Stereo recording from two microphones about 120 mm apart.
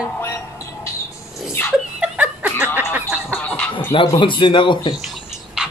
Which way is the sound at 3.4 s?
15° left (ahead or behind).